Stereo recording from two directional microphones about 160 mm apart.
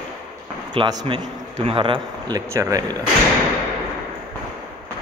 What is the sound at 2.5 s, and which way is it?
Speech, 20° right (ahead or behind).